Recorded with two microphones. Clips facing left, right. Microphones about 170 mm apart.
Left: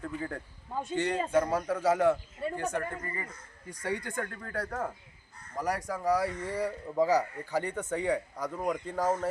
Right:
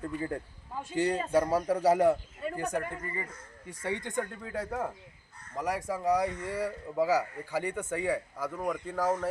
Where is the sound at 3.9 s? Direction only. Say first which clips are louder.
Right 3 dB; 20° right (ahead or behind).